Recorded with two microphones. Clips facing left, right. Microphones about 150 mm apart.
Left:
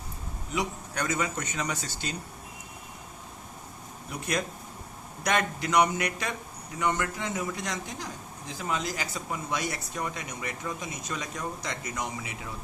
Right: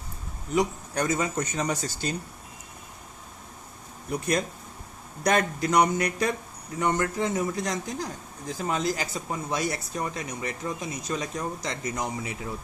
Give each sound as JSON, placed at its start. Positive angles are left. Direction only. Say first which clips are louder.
{"t": 0.5, "sound": "speech", "louder": "right 6 dB", "side_deg": -35}
{"t": 5.2, "sound": "speech", "louder": "right 4 dB", "side_deg": -40}